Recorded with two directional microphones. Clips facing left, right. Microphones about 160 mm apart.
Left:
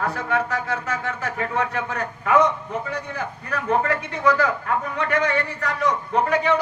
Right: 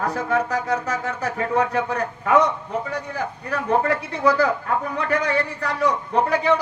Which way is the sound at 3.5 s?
35° right (ahead or behind).